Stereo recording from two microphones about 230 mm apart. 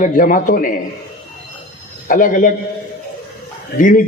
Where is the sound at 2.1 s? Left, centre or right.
Left.